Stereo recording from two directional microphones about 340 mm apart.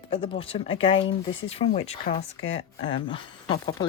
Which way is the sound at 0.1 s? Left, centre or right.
Centre.